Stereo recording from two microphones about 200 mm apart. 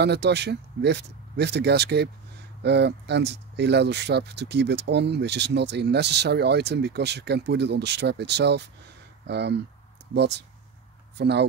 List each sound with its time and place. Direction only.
0.0 s speech: 55° right (ahead or behind)